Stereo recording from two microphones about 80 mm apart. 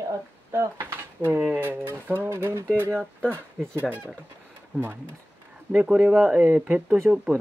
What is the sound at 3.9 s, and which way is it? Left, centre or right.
Speech, right.